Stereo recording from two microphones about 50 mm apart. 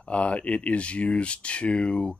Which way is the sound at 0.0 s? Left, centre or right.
Left.